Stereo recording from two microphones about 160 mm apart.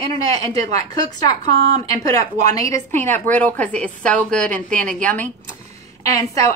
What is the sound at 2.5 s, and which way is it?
A woman's voice, 15° left (ahead or behind).